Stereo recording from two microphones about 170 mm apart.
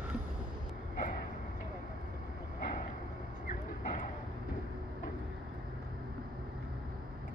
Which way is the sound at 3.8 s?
50° left (ahead or behind).